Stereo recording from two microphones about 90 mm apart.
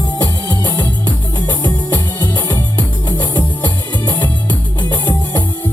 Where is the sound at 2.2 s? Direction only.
45° left (ahead or behind).